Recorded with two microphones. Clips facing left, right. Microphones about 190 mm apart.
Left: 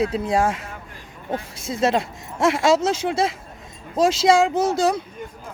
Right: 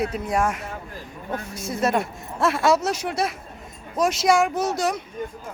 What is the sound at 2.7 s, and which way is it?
Speech, 25° left (ahead or behind).